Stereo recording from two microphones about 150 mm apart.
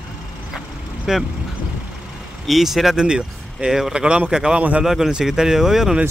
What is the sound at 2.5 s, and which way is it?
Speech, centre (ahead or behind).